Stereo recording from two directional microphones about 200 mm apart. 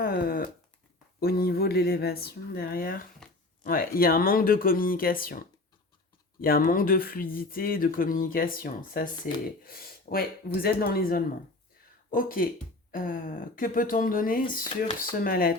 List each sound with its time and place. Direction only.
0.0 s speech: 50° left (ahead or behind)
6.4 s speech: 45° left (ahead or behind)